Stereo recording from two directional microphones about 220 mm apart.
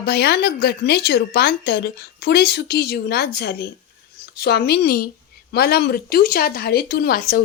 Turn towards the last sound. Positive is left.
turn(degrees=40)  # may be behind; listen again after turning